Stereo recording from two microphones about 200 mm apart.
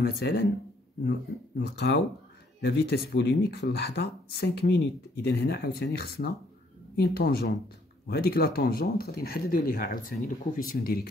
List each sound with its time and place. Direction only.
0.0 s speech: 55° left (ahead or behind)
1.6 s speech: 55° left (ahead or behind)